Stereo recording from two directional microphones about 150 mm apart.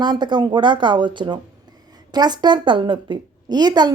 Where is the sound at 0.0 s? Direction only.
30° right (ahead or behind).